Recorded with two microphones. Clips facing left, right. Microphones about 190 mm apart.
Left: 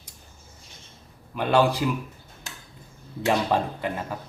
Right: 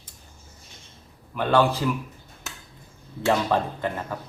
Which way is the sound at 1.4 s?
15° left (ahead or behind).